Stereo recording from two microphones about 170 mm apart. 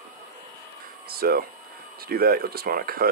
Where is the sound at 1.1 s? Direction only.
65° right (ahead or behind).